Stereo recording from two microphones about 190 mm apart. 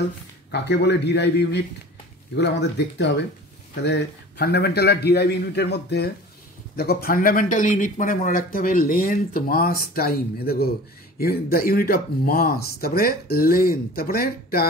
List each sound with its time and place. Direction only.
0.5 s a man's voice: 60° left (ahead or behind)